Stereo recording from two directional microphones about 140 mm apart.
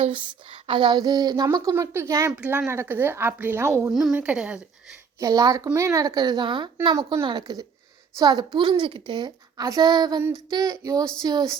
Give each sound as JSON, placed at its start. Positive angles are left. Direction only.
{"t": 0.0, "sound": "a woman's voice", "side_deg": -40}
{"t": 4.1, "sound": "a woman's voice", "side_deg": -10}
{"t": 5.2, "sound": "speech", "side_deg": -25}